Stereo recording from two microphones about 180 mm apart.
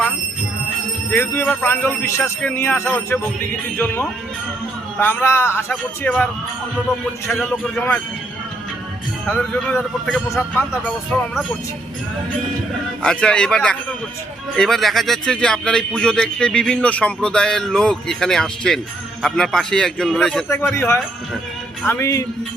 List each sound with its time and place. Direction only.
1.1 s a man's voice: 10° left (ahead or behind)
7.5 s a man's voice: 5° left (ahead or behind)
9.2 s a man's voice: 10° left (ahead or behind)
13.0 s a man's voice: 5° left (ahead or behind)
20.5 s a man's voice: 15° left (ahead or behind)